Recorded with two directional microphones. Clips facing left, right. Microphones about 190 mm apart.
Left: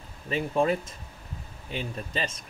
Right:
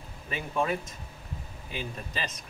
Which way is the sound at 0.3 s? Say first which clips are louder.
Left 5 dB; 30° left (ahead or behind).